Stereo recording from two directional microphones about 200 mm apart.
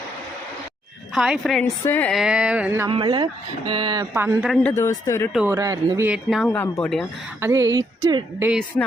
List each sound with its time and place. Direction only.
1.1 s speech: centre (ahead or behind)
1.6 s speech: 15° left (ahead or behind)
2.0 s speech: centre (ahead or behind)
2.9 s speech: 25° right (ahead or behind)
4.2 s speech: 5° right (ahead or behind)
4.5 s speech: 10° left (ahead or behind)
5.5 s speech: 15° right (ahead or behind)
6.1 s speech: centre (ahead or behind)
7.4 s speech: 15° right (ahead or behind)